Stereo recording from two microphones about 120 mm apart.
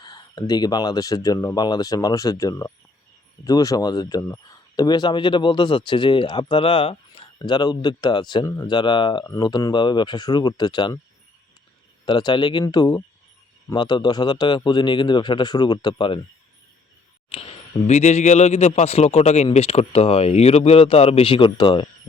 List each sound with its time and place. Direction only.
0.0 s speech: 40° left (ahead or behind)
9.2 s speech: 30° left (ahead or behind)
12.0 s speech: 40° left (ahead or behind)
17.2 s speech: 55° left (ahead or behind)